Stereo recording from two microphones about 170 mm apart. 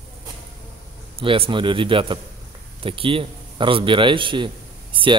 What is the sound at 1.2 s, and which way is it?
A man's voice, 35° right (ahead or behind).